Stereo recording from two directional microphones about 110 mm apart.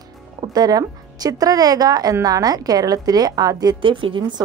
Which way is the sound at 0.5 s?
35° right (ahead or behind).